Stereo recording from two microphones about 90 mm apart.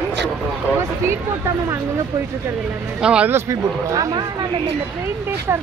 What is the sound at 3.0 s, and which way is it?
Speech, 10° right (ahead or behind).